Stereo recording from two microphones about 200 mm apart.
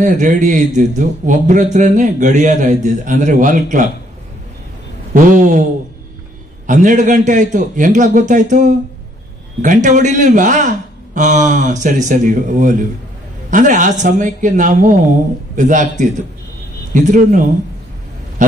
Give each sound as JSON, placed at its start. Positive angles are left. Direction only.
{"t": 0.0, "sound": "a man's voice", "side_deg": -40}
{"t": 5.1, "sound": "a man's voice", "side_deg": -40}
{"t": 6.7, "sound": "a man's voice", "side_deg": -40}